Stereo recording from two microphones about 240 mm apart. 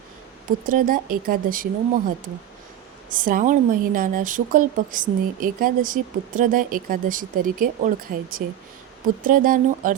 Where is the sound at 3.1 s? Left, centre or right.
Right.